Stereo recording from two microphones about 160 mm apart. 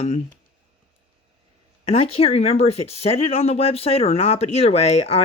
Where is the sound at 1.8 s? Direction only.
35° left (ahead or behind).